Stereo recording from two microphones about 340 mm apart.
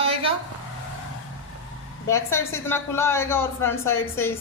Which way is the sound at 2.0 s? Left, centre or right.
Centre.